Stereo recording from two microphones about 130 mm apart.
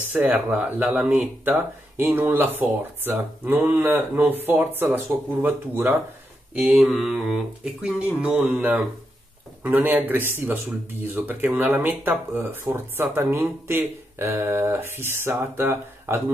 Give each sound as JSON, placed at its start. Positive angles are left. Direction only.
{"t": 0.1, "sound": "speech", "side_deg": -15}
{"t": 6.5, "sound": "speech", "side_deg": -5}